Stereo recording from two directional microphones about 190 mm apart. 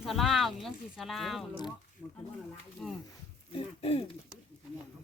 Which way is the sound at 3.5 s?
30° left (ahead or behind).